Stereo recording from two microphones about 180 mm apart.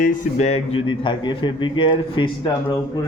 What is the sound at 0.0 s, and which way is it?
Speech, 40° left (ahead or behind).